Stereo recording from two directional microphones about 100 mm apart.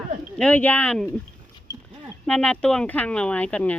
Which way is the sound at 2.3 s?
10° left (ahead or behind).